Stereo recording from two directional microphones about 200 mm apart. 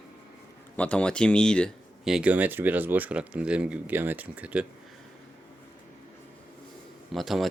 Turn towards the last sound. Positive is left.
turn(degrees=0)  # may be behind; listen again after turning